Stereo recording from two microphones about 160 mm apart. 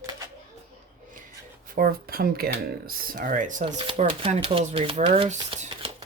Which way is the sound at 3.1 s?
55° right (ahead or behind).